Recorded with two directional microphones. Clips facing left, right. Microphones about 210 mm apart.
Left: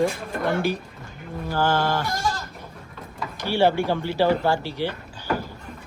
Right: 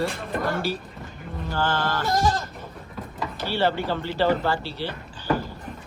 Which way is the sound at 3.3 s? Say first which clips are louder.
Left 4 dB; 10° left (ahead or behind).